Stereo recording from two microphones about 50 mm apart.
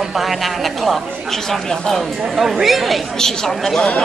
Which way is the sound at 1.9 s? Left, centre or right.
Centre.